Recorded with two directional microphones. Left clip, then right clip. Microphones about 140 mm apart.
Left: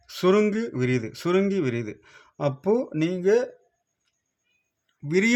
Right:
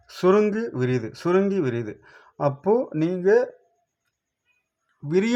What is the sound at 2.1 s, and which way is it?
Speech, 30° left (ahead or behind).